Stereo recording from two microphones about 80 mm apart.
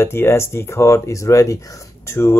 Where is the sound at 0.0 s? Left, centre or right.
Left.